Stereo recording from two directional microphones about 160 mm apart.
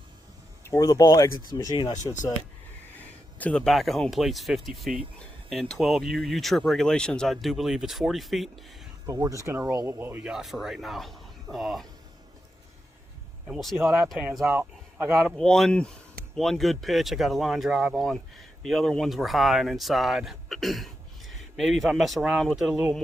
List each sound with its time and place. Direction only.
0.7 s speech: 20° left (ahead or behind)
3.3 s speech: 5° left (ahead or behind)
9.0 s speech: 20° right (ahead or behind); by 11.9 s centre (ahead or behind)
13.5 s speech: centre (ahead or behind)
13.7 s speech: 15° right (ahead or behind)
14.1 s speech: centre (ahead or behind)
14.4 s speech: 15° right (ahead or behind)
15.2 s speech: 5° left (ahead or behind)